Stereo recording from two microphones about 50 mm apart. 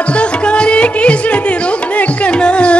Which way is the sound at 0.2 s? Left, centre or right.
Left.